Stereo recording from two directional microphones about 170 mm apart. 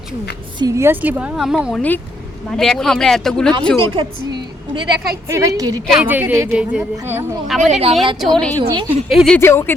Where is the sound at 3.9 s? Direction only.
30° right (ahead or behind).